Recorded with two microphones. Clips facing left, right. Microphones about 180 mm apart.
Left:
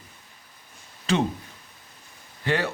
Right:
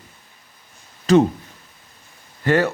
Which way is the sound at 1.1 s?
40° right (ahead or behind).